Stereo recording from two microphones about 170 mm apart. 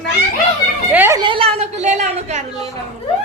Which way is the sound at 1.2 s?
30° right (ahead or behind).